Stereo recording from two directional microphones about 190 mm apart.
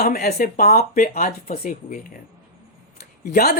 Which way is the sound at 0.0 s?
55° left (ahead or behind).